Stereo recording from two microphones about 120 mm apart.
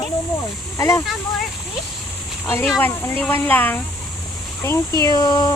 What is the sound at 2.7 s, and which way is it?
Speech, 20° left (ahead or behind).